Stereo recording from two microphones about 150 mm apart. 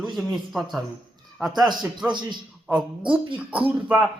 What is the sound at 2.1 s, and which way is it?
Speech, 30° right (ahead or behind).